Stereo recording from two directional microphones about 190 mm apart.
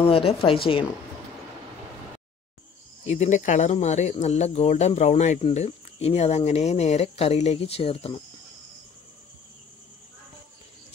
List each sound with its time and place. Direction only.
0.0 s speech: 30° left (ahead or behind)
3.1 s speech: 40° left (ahead or behind)